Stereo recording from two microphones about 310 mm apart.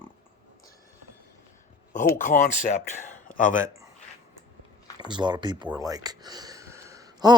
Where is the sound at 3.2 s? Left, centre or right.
Left.